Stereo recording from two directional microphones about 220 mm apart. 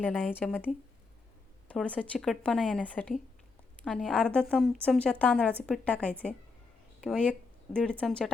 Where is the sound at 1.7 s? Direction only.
5° left (ahead or behind).